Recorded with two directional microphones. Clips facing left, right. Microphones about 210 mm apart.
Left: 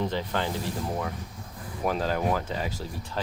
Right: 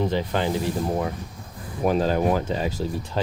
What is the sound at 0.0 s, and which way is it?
Speech, 15° right (ahead or behind).